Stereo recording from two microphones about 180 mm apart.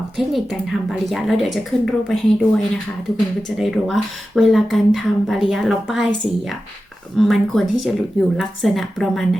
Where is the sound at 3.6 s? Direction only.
Centre (ahead or behind).